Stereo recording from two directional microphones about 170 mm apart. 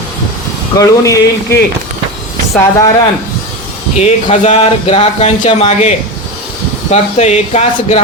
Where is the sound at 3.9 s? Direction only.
45° left (ahead or behind).